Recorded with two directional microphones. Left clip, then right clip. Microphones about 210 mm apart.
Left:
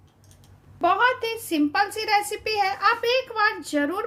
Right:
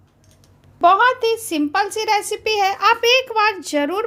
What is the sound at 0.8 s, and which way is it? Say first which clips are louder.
A woman's voice: right 7 dB; 30° right (ahead or behind).